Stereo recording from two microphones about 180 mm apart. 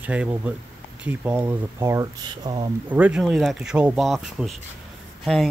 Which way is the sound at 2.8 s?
10° right (ahead or behind).